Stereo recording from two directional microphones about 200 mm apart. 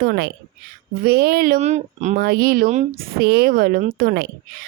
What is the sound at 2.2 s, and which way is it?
Speech, 50° right (ahead or behind).